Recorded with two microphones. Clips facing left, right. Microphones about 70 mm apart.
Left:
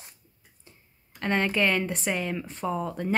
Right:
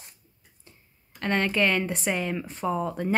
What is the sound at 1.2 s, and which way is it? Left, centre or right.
Speech, centre.